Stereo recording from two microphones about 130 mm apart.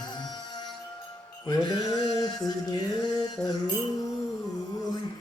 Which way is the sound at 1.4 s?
35° left (ahead or behind).